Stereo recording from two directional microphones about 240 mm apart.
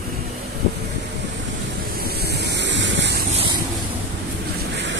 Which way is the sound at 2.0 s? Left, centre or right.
Right.